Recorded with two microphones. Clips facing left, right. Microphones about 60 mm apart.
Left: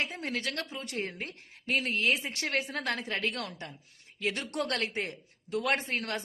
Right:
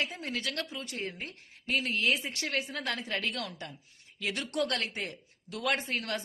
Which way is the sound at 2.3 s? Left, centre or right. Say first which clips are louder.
Left 2 dB; left.